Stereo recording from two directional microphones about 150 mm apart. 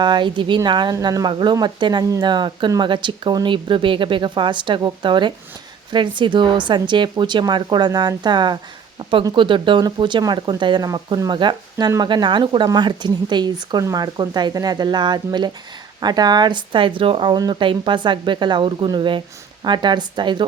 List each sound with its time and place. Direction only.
0.0 s speech: 30° right (ahead or behind)